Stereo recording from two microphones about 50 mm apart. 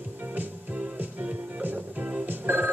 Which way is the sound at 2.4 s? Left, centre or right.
Right.